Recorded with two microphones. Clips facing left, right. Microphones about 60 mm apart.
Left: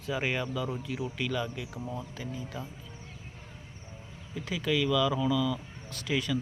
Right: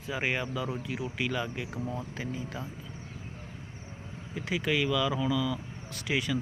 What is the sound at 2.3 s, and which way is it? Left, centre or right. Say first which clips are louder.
Speech: right 2 dB; right.